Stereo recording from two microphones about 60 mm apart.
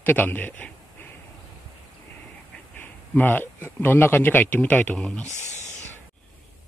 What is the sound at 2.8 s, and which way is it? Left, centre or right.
Speech, left.